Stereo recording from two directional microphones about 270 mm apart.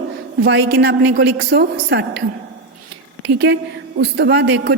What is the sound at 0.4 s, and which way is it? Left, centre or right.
Speech, right.